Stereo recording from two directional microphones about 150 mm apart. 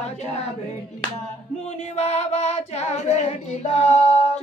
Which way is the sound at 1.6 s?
50° left (ahead or behind).